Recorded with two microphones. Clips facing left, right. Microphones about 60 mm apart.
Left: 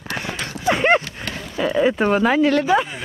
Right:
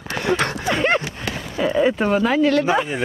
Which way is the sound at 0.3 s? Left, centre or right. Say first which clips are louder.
Right 9 dB; right.